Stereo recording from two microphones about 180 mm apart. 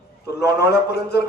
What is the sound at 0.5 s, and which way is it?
Speech, 65° left (ahead or behind).